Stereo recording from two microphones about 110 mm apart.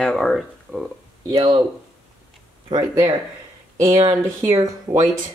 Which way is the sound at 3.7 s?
30° right (ahead or behind).